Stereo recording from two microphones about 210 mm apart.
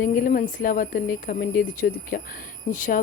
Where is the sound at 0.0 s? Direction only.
40° left (ahead or behind).